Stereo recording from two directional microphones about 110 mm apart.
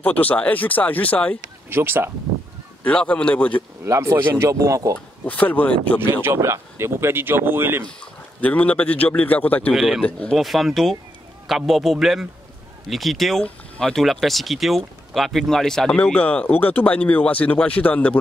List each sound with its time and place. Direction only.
0.0 s speech: 15° left (ahead or behind)
1.7 s speech: 20° right (ahead or behind)
2.8 s speech: 10° left (ahead or behind)
3.8 s speech: 25° right (ahead or behind)
5.2 s speech: 15° left (ahead or behind)
6.2 s speech: 25° right (ahead or behind)
8.4 s speech: 15° left (ahead or behind)
9.8 s speech: 5° right (ahead or behind)
10.0 s speech: 10° left (ahead or behind)
10.3 s speech: centre (ahead or behind)
16.0 s speech: 15° left (ahead or behind)